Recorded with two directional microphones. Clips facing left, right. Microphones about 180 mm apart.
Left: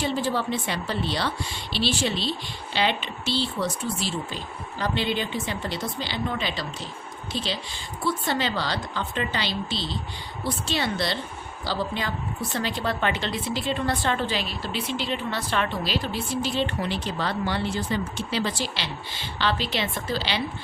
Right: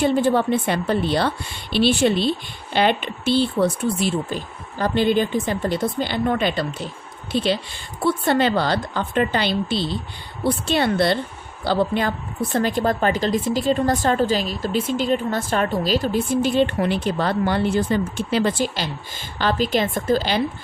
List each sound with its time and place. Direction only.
0.0 s a woman's voice: 55° right (ahead or behind)